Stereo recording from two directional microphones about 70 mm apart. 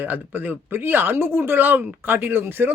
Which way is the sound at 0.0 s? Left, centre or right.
Right.